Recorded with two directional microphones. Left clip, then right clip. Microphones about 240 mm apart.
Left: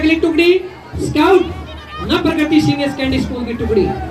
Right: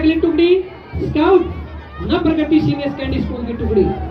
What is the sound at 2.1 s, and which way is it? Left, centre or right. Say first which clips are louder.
A woman's voice: left 1 dB; left.